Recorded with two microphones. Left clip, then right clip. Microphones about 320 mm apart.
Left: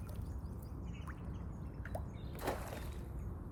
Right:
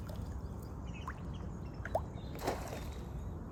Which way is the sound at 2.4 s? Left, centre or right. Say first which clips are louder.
Right 2 dB; centre.